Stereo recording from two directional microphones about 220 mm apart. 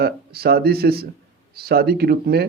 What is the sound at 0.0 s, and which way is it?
Speech, 45° right (ahead or behind).